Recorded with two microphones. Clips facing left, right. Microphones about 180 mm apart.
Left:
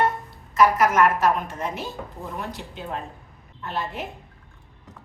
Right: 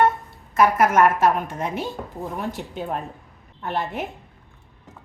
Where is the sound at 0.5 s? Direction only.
55° right (ahead or behind).